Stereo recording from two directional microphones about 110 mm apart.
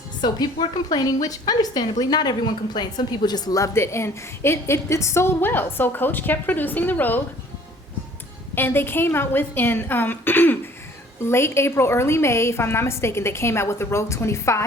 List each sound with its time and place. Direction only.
0.2 s a woman's voice: 40° left (ahead or behind); by 7.2 s 15° left (ahead or behind)
8.5 s a woman's voice: 20° left (ahead or behind)